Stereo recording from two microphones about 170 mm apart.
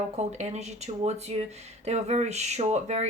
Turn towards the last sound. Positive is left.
turn(degrees=-40)  # may be behind; listen again after turning